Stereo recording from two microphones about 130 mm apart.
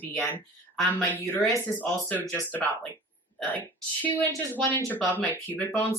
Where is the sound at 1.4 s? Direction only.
10° left (ahead or behind).